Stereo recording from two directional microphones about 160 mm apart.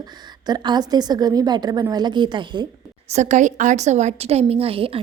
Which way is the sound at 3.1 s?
50° right (ahead or behind).